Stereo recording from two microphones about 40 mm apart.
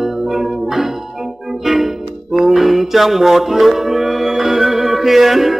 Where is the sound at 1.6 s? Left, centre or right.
Centre.